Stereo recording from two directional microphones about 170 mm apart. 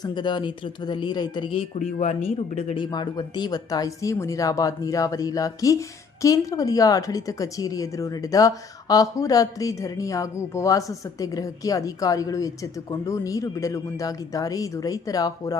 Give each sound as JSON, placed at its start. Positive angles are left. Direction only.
{"t": 0.0, "sound": "a woman's voice", "side_deg": 25}
{"t": 1.8, "sound": "speech", "side_deg": 45}
{"t": 2.8, "sound": "a woman's voice", "side_deg": 25}